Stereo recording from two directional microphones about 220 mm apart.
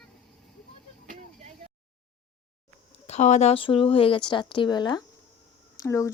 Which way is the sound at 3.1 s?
30° left (ahead or behind).